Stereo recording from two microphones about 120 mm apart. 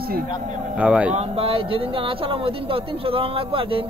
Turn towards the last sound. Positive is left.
turn(degrees=-45)  # may be behind; listen again after turning